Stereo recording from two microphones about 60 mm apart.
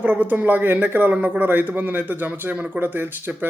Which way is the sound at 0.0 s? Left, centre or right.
Right.